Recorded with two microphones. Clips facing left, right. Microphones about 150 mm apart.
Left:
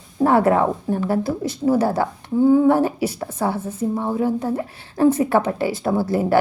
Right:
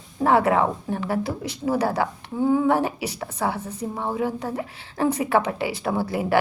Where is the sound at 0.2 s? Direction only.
45° left (ahead or behind).